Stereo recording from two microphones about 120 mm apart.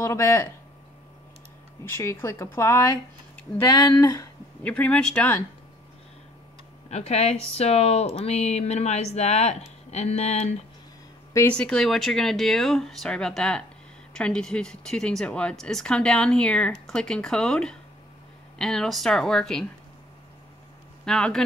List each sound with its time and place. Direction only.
0.0 s speech: 20° left (ahead or behind)
1.9 s speech: 20° left (ahead or behind)
4.6 s speech: 10° left (ahead or behind)
6.9 s speech: 65° left (ahead or behind)
11.5 s speech: 5° left (ahead or behind)
21.0 s speech: 5° left (ahead or behind)